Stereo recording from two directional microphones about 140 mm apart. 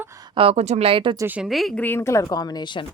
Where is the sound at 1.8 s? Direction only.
15° left (ahead or behind); by 2.9 s 35° left (ahead or behind).